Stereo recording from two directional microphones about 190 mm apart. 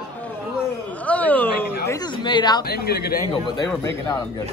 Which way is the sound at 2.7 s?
55° left (ahead or behind).